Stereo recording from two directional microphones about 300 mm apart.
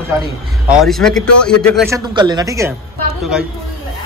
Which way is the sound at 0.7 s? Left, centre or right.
Centre.